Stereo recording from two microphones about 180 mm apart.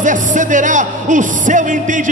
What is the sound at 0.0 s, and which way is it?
Music, 45° right (ahead or behind).